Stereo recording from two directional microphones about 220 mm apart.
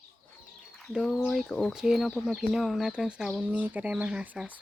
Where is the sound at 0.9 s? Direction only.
Centre (ahead or behind).